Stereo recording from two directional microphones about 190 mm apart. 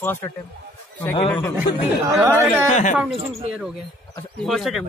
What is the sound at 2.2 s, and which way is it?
Speech, 10° right (ahead or behind).